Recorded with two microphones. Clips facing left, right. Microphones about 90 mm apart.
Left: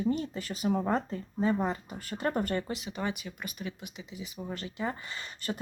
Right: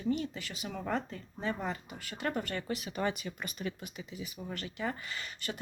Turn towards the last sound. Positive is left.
turn(degrees=30)  # may be behind; listen again after turning